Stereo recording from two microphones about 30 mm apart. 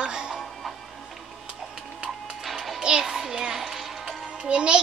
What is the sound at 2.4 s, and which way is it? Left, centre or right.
Music, centre.